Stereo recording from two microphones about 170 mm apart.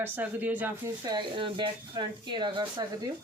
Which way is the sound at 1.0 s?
25° right (ahead or behind).